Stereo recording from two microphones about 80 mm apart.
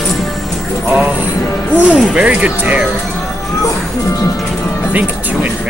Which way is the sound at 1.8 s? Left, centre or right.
Centre.